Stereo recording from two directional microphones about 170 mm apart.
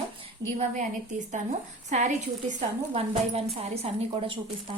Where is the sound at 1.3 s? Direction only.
45° right (ahead or behind).